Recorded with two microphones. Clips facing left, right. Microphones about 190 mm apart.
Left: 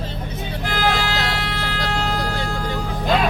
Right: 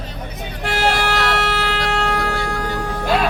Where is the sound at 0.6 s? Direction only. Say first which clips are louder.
Right 3 dB; 70° right (ahead or behind).